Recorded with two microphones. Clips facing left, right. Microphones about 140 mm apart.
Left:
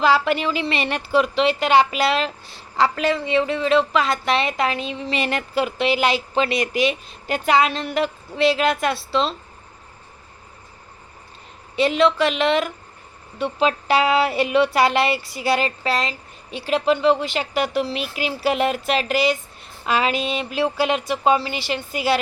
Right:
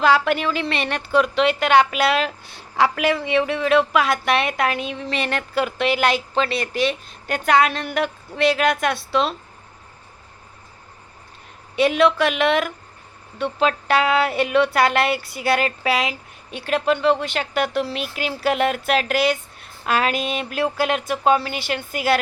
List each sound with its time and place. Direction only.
0.0 s a woman's voice: centre (ahead or behind)
11.8 s a woman's voice: centre (ahead or behind)
21.9 s a woman's voice: 50° right (ahead or behind)